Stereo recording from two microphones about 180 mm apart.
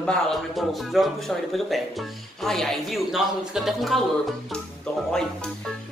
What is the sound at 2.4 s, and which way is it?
Speech, centre (ahead or behind).